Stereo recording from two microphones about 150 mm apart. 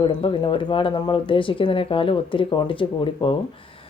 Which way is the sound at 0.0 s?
35° left (ahead or behind).